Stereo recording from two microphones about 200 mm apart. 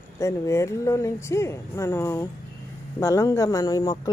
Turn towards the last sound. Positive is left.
turn(degrees=20)  # may be behind; listen again after turning